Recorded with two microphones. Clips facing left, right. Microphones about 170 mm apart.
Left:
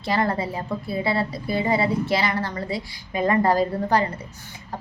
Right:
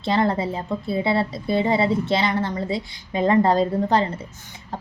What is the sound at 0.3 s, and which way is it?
A woman's voice, 25° right (ahead or behind).